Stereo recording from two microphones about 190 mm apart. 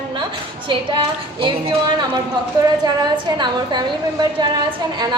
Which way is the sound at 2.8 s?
20° right (ahead or behind).